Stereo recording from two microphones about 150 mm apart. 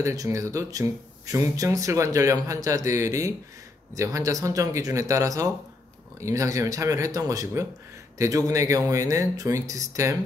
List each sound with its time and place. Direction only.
0.0 s speech: 20° right (ahead or behind)